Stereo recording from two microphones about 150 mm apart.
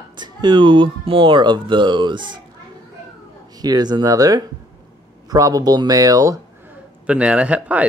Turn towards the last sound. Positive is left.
turn(degrees=-10)  # may be behind; listen again after turning